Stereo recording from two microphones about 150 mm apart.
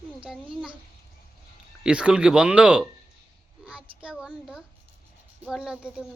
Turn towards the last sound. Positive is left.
turn(degrees=-5)  # may be behind; listen again after turning